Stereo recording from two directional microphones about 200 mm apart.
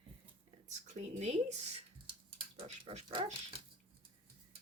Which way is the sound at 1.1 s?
30° right (ahead or behind).